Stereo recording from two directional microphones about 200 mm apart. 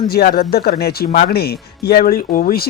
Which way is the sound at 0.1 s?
50° left (ahead or behind).